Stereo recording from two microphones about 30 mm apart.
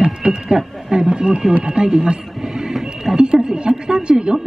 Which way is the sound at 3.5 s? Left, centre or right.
Right.